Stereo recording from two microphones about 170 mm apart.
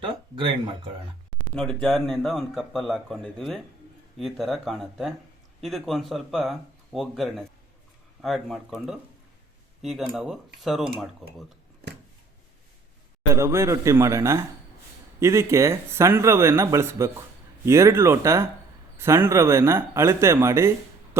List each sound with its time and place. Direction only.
0.0 s a sound: 30° right (ahead or behind)
1.5 s speech: 5° left (ahead or behind)
13.3 s speech: 15° right (ahead or behind)